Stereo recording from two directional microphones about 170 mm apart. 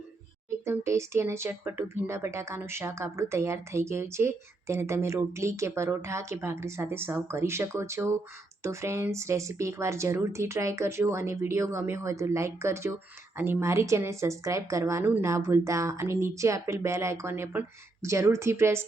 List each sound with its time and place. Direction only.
0.6 s speech: 15° right (ahead or behind)